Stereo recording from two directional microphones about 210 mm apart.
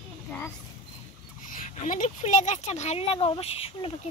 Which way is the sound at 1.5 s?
40° left (ahead or behind).